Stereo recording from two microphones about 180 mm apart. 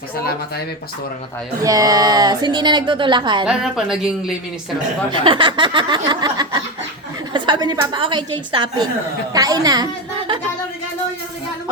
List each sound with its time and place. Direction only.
1.6 s a woman's voice: 20° right (ahead or behind)
3.4 s speech: 5° right (ahead or behind)
5.1 s a woman's voice: 30° right (ahead or behind)